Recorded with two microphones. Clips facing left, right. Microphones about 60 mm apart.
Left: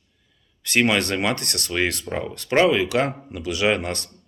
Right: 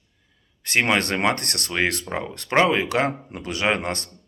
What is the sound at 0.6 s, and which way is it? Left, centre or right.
Speech, right.